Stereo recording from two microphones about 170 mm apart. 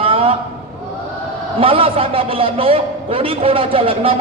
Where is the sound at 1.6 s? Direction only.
35° right (ahead or behind).